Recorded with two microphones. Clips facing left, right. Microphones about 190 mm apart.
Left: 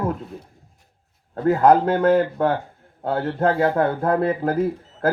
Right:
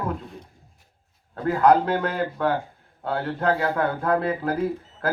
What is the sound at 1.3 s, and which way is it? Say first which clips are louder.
Speech: left 3 dB; 45° left (ahead or behind).